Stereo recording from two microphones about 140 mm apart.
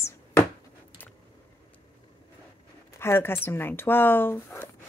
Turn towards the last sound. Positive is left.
turn(degrees=15)  # may be behind; listen again after turning